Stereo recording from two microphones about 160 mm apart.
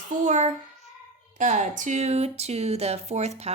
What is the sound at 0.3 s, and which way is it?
Speech, 45° right (ahead or behind).